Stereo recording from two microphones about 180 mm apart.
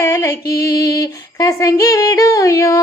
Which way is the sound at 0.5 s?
20° left (ahead or behind).